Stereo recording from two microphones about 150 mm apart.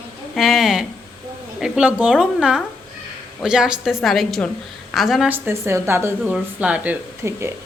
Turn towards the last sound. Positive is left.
turn(degrees=-15)  # may be behind; listen again after turning